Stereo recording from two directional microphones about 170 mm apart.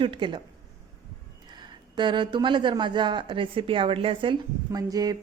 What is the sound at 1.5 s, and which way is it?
A woman's voice, 25° right (ahead or behind).